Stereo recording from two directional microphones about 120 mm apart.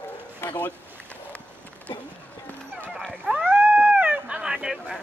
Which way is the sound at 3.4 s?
15° right (ahead or behind).